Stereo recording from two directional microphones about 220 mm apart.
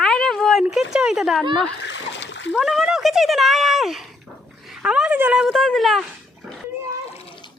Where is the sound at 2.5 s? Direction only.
Centre (ahead or behind).